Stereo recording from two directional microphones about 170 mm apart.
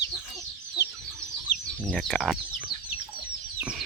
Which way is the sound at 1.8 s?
5° left (ahead or behind).